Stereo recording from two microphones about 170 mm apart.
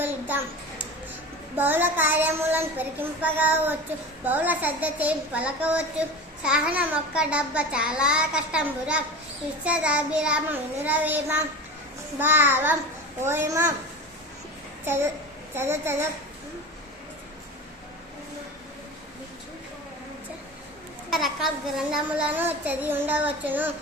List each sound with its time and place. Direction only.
0.0 s a sound: 10° right (ahead or behind)
1.5 s a child's voice: 10° right (ahead or behind)
15.5 s a child's voice: 15° right (ahead or behind)
21.1 s a child's voice: centre (ahead or behind)